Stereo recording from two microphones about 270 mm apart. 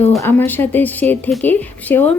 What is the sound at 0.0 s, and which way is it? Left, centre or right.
A woman's voice, centre.